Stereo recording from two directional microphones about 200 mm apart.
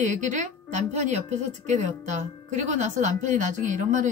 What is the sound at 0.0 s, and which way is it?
A woman's voice, 40° right (ahead or behind).